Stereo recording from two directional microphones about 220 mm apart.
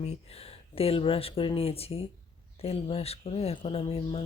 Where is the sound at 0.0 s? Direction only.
30° left (ahead or behind).